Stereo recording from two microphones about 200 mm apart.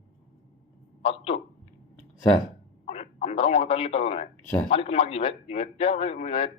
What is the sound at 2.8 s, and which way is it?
A man's voice, 35° left (ahead or behind).